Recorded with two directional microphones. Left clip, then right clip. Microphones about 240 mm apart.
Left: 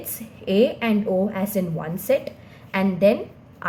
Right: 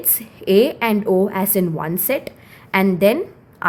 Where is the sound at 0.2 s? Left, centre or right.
Right.